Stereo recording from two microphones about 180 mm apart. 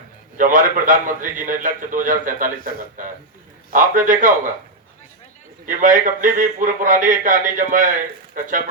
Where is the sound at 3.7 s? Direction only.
50° right (ahead or behind).